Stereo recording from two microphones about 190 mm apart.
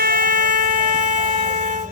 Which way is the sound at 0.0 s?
50° right (ahead or behind).